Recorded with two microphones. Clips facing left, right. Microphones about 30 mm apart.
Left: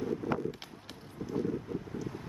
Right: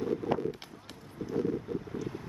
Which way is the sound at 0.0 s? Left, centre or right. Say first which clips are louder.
Right 2 dB; right.